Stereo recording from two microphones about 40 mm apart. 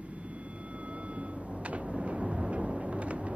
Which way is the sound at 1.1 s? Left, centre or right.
Right.